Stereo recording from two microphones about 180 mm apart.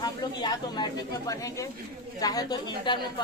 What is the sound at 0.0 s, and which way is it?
Speech, 25° left (ahead or behind).